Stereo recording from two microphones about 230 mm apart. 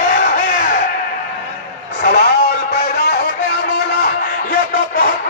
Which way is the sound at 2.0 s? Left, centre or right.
Left.